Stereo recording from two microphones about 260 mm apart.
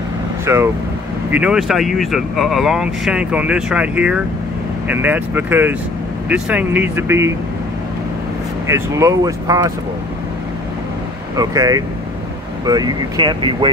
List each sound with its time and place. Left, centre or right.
0.5 s speech: centre
8.6 s speech: centre
11.3 s speech: centre